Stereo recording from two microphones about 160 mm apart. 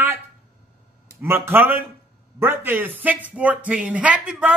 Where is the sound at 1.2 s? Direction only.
15° right (ahead or behind).